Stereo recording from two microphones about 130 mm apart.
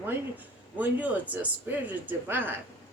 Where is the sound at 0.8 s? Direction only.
10° right (ahead or behind).